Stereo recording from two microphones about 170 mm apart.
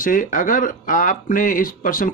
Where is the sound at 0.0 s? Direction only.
50° left (ahead or behind).